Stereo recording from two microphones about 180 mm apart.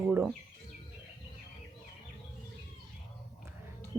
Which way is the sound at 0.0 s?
Centre (ahead or behind).